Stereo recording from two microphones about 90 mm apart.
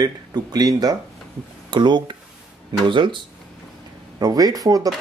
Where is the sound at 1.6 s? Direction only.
60° right (ahead or behind).